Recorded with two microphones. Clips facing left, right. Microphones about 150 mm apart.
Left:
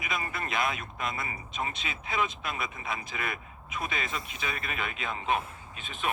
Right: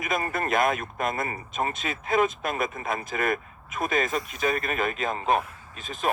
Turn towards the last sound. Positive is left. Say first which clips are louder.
# right 5 dB
turn(degrees=-40)  # may be behind; listen again after turning